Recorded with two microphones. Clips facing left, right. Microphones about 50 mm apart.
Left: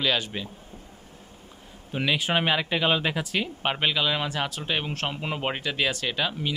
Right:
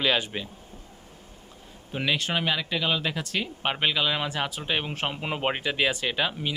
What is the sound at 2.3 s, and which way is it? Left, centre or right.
Speech, left.